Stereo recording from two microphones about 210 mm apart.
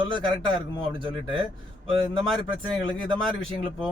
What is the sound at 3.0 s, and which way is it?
Speech, 25° right (ahead or behind).